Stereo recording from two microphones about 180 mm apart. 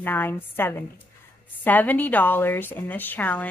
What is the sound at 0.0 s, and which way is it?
A woman's voice, 10° left (ahead or behind).